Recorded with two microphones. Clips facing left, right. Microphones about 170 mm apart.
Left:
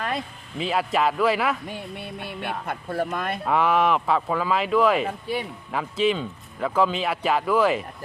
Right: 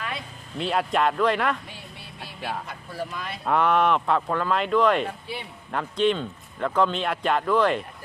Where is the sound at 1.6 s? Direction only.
55° left (ahead or behind).